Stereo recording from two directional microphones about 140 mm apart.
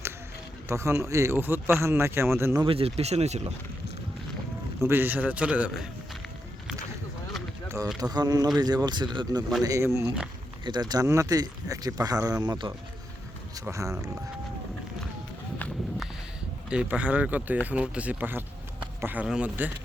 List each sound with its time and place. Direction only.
0.7 s speech: 20° right (ahead or behind)
2.6 s speech: 45° right (ahead or behind)
4.8 s a man's voice: 15° right (ahead or behind)
8.1 s speech: 30° right (ahead or behind)
9.6 s speech: 20° right (ahead or behind)
13.7 s speech: 20° right (ahead or behind)
15.5 s run: 10° left (ahead or behind)
16.6 s a man's voice: 10° right (ahead or behind)